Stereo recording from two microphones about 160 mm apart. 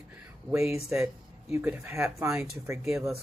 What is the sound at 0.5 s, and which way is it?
Speech, 15° right (ahead or behind).